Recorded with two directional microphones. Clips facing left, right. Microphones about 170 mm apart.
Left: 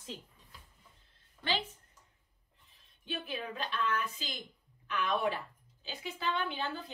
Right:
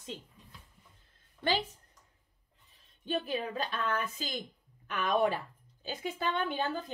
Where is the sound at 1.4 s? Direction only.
45° right (ahead or behind).